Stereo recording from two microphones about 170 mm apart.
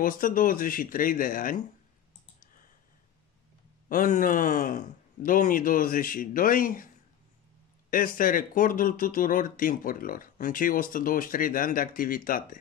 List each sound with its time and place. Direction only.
0.0 s speech: 55° left (ahead or behind)
3.9 s speech: 55° left (ahead or behind)
7.9 s speech: 55° left (ahead or behind)